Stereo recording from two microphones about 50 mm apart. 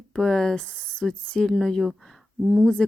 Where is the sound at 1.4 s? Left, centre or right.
Centre.